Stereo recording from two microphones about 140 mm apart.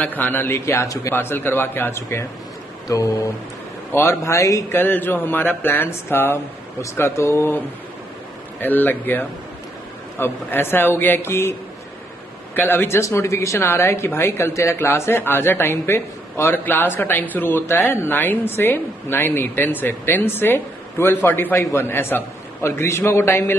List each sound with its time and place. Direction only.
0.0 s a woman's voice: 15° left (ahead or behind)
2.9 s mantra: 25° left (ahead or behind)
3.9 s a woman's voice: 20° left (ahead or behind)
12.5 s a woman's voice: 15° left (ahead or behind)